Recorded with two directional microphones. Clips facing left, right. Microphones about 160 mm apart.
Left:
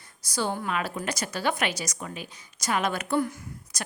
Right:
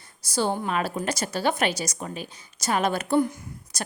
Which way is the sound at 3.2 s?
20° right (ahead or behind).